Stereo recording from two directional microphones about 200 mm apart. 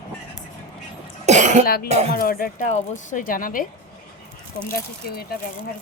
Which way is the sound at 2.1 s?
45° left (ahead or behind).